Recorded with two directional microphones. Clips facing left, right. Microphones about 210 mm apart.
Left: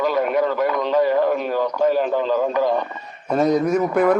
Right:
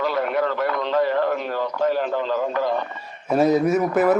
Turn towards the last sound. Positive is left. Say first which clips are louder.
# left 1 dB
turn(degrees=-5)  # may be behind; listen again after turning